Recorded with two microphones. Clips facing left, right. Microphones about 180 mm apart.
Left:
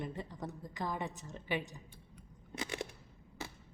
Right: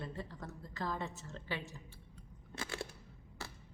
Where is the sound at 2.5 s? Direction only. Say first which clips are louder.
Left 3 dB; 20° left (ahead or behind).